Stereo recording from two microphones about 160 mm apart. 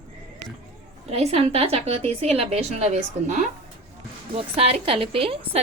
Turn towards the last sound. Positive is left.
turn(degrees=-35)  # may be behind; listen again after turning